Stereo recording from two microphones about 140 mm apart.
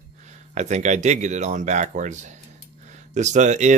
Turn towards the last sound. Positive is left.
turn(degrees=-60)  # may be behind; listen again after turning